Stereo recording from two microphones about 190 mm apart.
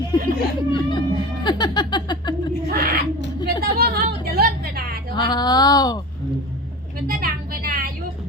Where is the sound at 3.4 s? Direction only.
55° right (ahead or behind).